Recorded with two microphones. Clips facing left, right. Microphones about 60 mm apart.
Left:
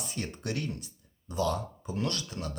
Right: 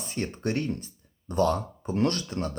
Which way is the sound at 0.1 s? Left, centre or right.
Right.